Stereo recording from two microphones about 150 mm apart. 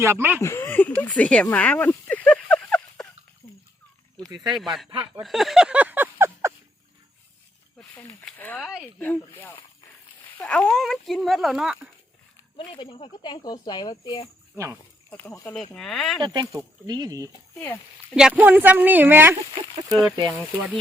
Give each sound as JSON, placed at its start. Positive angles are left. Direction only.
{"t": 0.0, "sound": "speech", "side_deg": -15}
{"t": 0.4, "sound": "a sound", "side_deg": 15}
{"t": 3.4, "sound": "a sound", "side_deg": 40}
{"t": 4.4, "sound": "speech", "side_deg": 0}
{"t": 4.9, "sound": "speech", "side_deg": -35}
{"t": 5.2, "sound": "a sound", "side_deg": 0}
{"t": 8.2, "sound": "speech", "side_deg": 10}
{"t": 12.5, "sound": "speech", "side_deg": 35}
{"t": 14.5, "sound": "speech", "side_deg": -20}
{"t": 15.1, "sound": "speech", "side_deg": 15}
{"t": 15.7, "sound": "speech", "side_deg": 5}
{"t": 16.2, "sound": "speech", "side_deg": -30}
{"t": 17.3, "sound": "speech", "side_deg": 15}
{"t": 18.1, "sound": "speech", "side_deg": -5}